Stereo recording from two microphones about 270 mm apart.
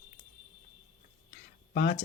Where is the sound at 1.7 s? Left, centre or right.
Left.